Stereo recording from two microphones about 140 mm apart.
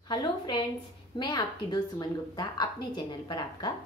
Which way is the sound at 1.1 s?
30° left (ahead or behind).